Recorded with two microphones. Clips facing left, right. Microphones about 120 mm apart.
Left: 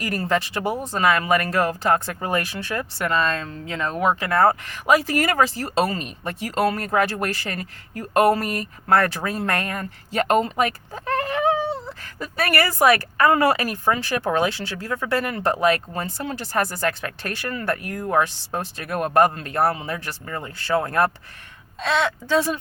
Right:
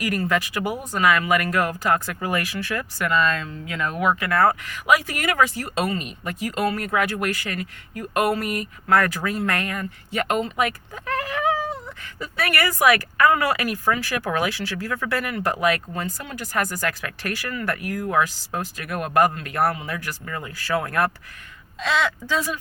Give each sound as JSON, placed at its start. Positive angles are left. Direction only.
{"t": 0.0, "sound": "speech", "side_deg": 30}